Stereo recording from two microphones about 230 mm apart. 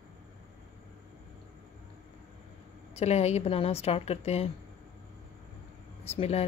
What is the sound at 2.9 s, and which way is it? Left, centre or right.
A woman's voice, left.